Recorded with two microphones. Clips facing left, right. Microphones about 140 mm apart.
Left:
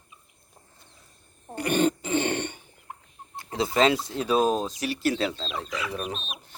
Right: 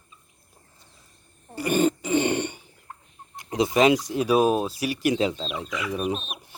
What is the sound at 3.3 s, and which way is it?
Speech, 15° right (ahead or behind).